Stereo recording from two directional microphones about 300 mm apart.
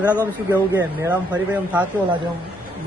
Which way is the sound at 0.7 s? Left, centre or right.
Centre.